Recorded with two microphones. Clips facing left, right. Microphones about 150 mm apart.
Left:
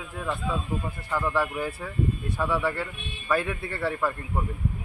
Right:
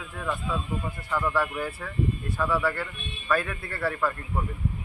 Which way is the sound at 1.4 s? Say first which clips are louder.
Left 1 dB; 10° left (ahead or behind).